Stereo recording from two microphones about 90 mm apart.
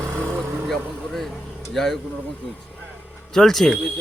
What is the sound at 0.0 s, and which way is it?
Vehicle, 30° right (ahead or behind).